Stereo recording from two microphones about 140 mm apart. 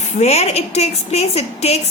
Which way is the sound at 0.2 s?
50° left (ahead or behind).